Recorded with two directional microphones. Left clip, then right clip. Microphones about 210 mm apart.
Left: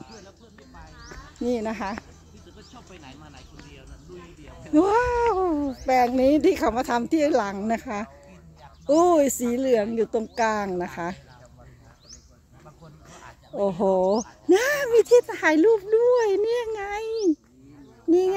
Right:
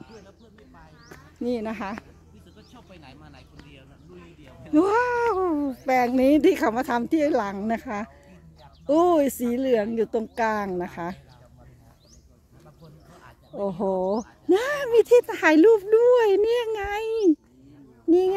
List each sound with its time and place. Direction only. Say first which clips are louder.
1.4 s speech: left 2 dB; 5° left (ahead or behind)
2.7 s a sound: left 2 dB; 55° right (ahead or behind)
4.7 s a child's voice: left 1 dB; 5° right (ahead or behind)
13.1 s speech: left 4 dB; 5° left (ahead or behind)
14.5 s a child's voice: left 2 dB; 10° right (ahead or behind); by 17.3 s 30° right (ahead or behind)